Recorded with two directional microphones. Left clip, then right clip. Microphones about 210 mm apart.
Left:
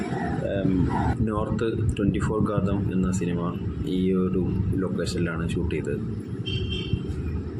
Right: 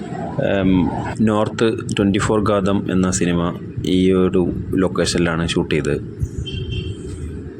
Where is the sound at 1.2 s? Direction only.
50° right (ahead or behind).